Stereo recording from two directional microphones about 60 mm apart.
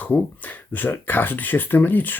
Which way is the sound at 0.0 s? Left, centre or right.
Left.